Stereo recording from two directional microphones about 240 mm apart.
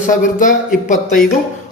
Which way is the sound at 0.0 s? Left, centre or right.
Left.